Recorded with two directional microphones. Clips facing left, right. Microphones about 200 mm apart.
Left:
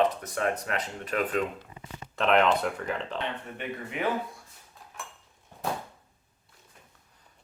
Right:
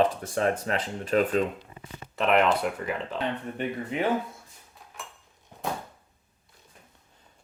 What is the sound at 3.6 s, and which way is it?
Speech, 30° right (ahead or behind).